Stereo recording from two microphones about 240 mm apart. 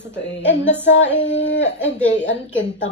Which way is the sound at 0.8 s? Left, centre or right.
Left.